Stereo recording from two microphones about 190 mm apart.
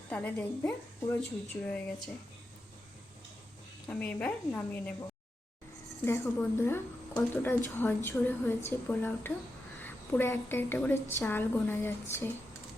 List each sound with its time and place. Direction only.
0.1 s a woman's voice: 10° left (ahead or behind)
3.8 s a woman's voice: 10° left (ahead or behind)
6.1 s a woman's voice: 10° left (ahead or behind)